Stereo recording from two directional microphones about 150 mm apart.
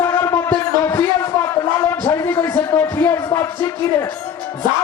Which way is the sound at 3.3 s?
20° left (ahead or behind).